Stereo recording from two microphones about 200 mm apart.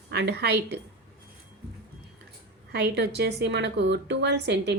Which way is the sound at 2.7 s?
55° right (ahead or behind).